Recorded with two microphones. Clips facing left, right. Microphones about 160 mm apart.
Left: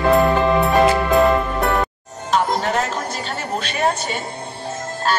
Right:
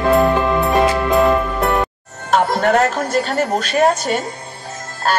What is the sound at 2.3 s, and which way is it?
Music, 60° right (ahead or behind).